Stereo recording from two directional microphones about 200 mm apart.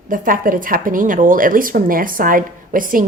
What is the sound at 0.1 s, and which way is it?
A woman's voice, 45° right (ahead or behind).